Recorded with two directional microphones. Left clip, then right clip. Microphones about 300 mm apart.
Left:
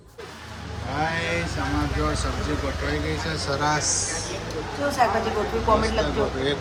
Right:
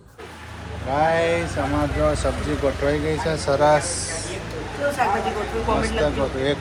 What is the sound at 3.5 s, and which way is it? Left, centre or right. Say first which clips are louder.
Speech: right 7 dB; centre.